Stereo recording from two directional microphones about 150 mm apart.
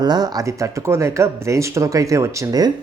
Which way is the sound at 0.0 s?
25° right (ahead or behind).